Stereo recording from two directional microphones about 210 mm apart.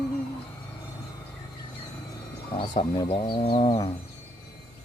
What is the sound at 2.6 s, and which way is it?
Speech, 25° left (ahead or behind).